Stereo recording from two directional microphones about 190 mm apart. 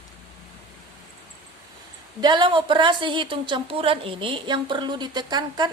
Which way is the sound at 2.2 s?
25° right (ahead or behind).